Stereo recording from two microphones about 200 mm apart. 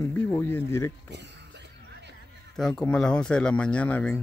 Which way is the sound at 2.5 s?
5° left (ahead or behind).